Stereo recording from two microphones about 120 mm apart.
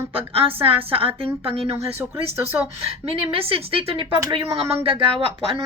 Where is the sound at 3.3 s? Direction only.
50° right (ahead or behind).